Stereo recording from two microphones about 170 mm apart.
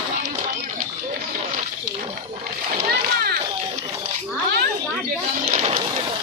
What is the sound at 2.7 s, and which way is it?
Speech, 65° right (ahead or behind).